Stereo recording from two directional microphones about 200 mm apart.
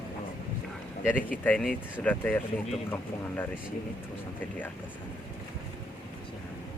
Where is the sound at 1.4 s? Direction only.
5° left (ahead or behind).